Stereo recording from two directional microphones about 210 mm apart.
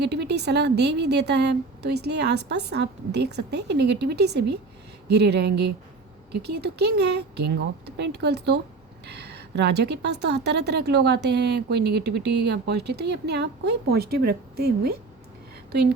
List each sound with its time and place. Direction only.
0.0 s a woman's voice: 55° right (ahead or behind)